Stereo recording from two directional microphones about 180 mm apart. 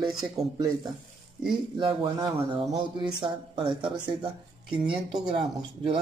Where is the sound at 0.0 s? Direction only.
Centre (ahead or behind).